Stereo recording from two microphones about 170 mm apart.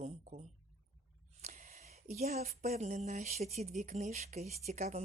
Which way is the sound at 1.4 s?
45° right (ahead or behind).